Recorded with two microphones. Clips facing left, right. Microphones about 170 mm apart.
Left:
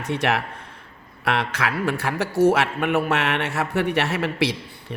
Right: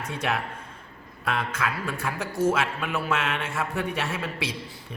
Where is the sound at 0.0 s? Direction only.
70° left (ahead or behind).